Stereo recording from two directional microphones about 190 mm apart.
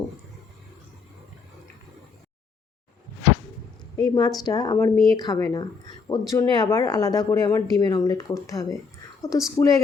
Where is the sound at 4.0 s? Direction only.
20° left (ahead or behind).